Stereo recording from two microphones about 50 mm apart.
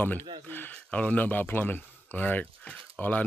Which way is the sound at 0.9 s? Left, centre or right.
Left.